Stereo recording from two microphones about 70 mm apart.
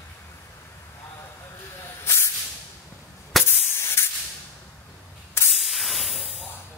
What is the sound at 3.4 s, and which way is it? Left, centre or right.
Spray, left.